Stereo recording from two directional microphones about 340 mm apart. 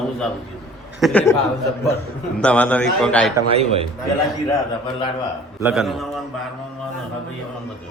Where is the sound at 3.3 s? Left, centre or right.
Centre.